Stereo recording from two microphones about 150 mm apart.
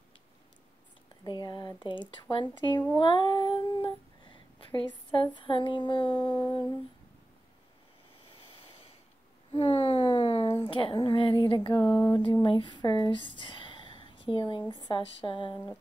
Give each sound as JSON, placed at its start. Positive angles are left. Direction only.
{"t": 1.2, "sound": "speech", "side_deg": 30}
{"t": 3.0, "sound": "child singing", "side_deg": 30}
{"t": 8.3, "sound": "a sound", "side_deg": 35}
{"t": 12.1, "sound": "speech", "side_deg": 30}